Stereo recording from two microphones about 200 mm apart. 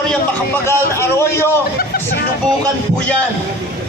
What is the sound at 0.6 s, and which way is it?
Speech, 15° left (ahead or behind).